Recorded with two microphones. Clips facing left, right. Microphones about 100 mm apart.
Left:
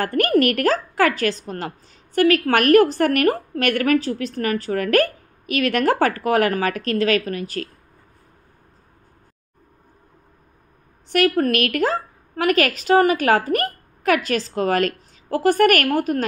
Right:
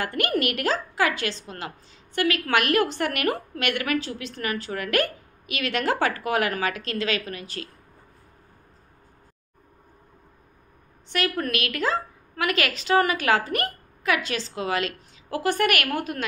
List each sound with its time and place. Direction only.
0.0 s a woman's voice: 45° left (ahead or behind)
11.1 s a woman's voice: 45° left (ahead or behind)